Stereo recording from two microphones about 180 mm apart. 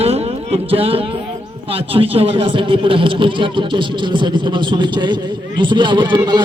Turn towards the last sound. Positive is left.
turn(degrees=-25)  # may be behind; listen again after turning